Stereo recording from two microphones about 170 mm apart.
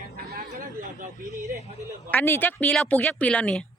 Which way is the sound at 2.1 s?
10° left (ahead or behind).